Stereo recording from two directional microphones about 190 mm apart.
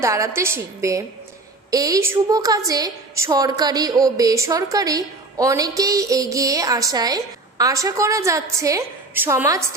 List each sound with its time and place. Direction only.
0.0 s a woman's voice: 15° right (ahead or behind)